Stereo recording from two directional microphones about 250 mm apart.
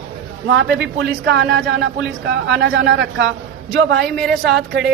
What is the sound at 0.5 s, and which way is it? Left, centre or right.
Speech, right.